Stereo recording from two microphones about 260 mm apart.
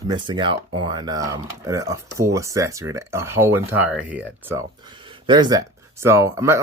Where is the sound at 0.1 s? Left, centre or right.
Centre.